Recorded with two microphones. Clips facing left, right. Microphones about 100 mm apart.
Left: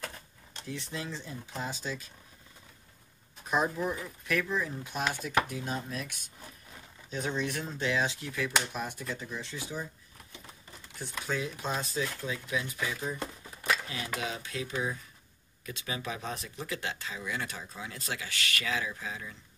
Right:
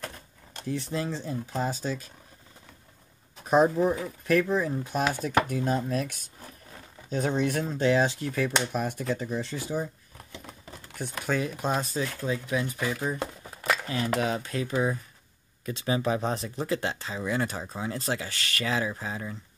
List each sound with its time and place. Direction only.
0.5 s speech: 45° right (ahead or behind)
3.4 s speech: 40° right (ahead or behind)
11.0 s speech: 60° right (ahead or behind)
15.6 s speech: 35° right (ahead or behind)